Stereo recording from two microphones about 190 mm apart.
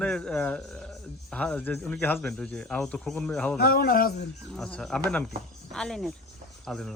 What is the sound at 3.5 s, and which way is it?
Speech, 50° left (ahead or behind).